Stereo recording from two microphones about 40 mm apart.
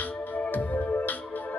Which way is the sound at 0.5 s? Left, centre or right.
Left.